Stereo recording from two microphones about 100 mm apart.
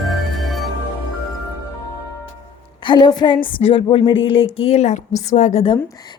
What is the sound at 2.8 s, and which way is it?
Speech, 45° left (ahead or behind).